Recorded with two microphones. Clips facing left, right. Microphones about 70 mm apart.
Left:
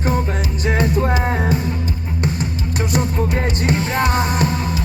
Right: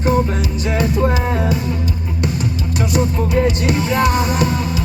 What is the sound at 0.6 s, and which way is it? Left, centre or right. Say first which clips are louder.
Music: even; left.